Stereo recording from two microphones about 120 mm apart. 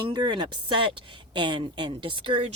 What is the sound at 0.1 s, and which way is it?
A woman's voice, 40° right (ahead or behind).